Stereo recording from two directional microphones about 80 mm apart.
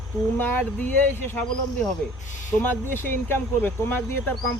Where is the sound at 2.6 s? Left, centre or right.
Left.